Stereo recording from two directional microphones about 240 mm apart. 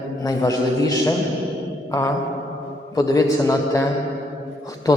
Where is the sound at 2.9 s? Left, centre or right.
Centre.